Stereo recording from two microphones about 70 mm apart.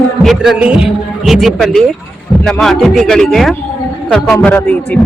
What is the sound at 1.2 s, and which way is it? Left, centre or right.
A woman's voice, centre.